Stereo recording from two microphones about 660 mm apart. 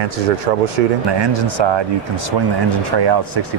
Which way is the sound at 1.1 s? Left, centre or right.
Right.